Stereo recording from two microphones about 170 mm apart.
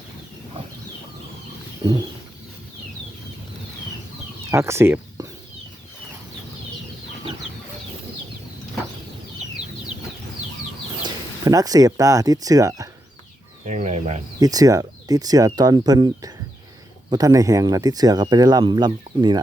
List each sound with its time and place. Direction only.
1.8 s bird: 25° right (ahead or behind)
4.5 s speech: 15° right (ahead or behind)
11.0 s speech: 20° right (ahead or behind)
13.7 s speech: 40° right (ahead or behind)
14.3 s speech: 20° right (ahead or behind)